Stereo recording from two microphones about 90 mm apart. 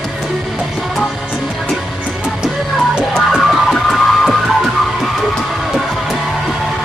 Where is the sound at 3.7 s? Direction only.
5° left (ahead or behind).